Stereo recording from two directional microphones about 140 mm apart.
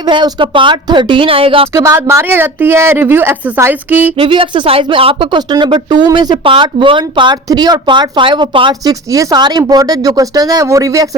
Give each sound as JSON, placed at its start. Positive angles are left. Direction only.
{"t": 0.0, "sound": "speech", "side_deg": -30}
{"t": 1.7, "sound": "speech", "side_deg": -20}
{"t": 4.2, "sound": "speech", "side_deg": -35}
{"t": 8.9, "sound": "speech", "side_deg": -25}